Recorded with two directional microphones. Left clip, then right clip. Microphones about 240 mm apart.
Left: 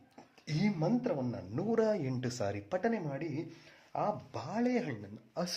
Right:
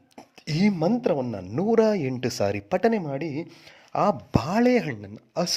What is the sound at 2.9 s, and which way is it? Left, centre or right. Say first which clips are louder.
A man's voice: right 10 dB; right.